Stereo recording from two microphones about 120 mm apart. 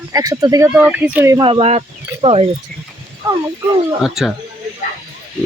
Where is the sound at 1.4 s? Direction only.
45° right (ahead or behind).